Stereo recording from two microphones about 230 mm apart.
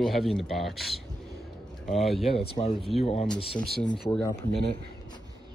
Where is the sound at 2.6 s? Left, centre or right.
Left.